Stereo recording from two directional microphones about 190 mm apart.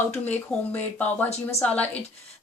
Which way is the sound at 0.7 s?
10° left (ahead or behind).